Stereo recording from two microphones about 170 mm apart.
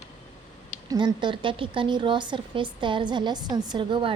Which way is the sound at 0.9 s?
25° right (ahead or behind).